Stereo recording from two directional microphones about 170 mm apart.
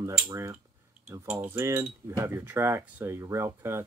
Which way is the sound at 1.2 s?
5° right (ahead or behind).